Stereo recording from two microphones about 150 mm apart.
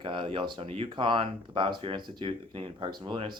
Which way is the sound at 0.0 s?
35° right (ahead or behind).